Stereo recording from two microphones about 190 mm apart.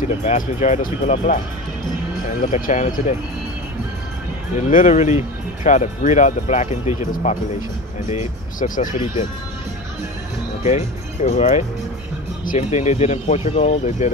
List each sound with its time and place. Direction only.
0.2 s speech: 35° left (ahead or behind)
4.6 s speech: 40° left (ahead or behind)
10.6 s speech: 35° left (ahead or behind)